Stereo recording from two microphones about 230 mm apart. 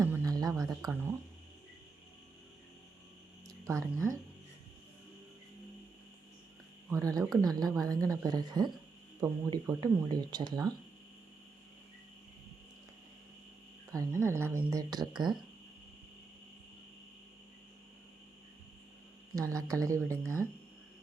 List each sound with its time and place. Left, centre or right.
0.0 s music: centre
3.6 s speech: centre
6.9 s speech: centre
13.9 s speech: centre
19.4 s speech: centre